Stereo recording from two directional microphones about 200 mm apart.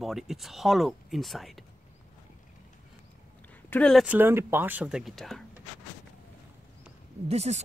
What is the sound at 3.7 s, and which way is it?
Speech, 5° left (ahead or behind).